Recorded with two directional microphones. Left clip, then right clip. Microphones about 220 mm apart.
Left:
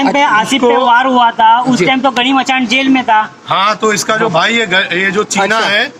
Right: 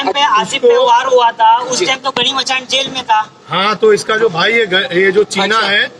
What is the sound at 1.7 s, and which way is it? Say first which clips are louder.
Speech: left 4 dB; 50° left (ahead or behind).